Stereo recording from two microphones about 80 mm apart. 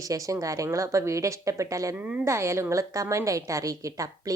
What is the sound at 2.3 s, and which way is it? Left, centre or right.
A woman's voice, right.